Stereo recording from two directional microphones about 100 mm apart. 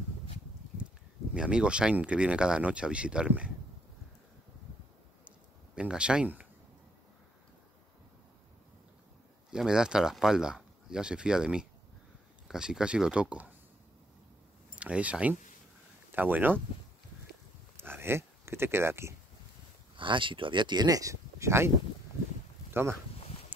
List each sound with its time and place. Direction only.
1.3 s speech: 10° right (ahead or behind)
5.8 s speech: 10° right (ahead or behind)
9.5 s speech: 5° right (ahead or behind)
14.8 s speech: 10° right (ahead or behind)
17.7 s speech: 25° right (ahead or behind)
20.0 s speech: 55° right (ahead or behind); by 22.9 s 25° right (ahead or behind)